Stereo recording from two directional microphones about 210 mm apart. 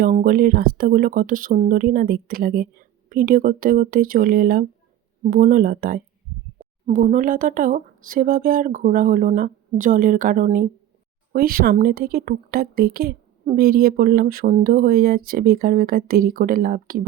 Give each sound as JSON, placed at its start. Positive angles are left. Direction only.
{"t": 0.0, "sound": "speech", "side_deg": -40}